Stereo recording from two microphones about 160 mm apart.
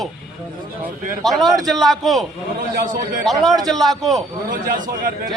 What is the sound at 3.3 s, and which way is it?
Speech, centre (ahead or behind).